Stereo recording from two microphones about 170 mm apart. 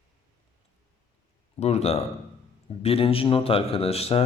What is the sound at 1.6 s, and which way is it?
A man's voice, 40° left (ahead or behind).